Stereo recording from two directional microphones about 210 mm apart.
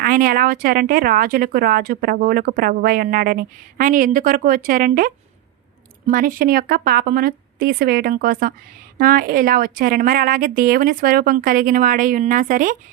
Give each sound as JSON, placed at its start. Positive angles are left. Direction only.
{"t": 0.0, "sound": "a woman's voice", "side_deg": -40}